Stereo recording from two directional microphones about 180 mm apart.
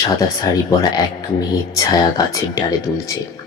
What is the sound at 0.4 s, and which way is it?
Speech, 20° left (ahead or behind).